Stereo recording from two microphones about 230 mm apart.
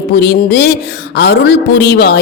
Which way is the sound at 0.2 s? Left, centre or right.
Left.